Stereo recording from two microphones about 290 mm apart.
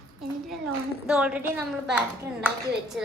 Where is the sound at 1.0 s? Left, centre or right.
Centre.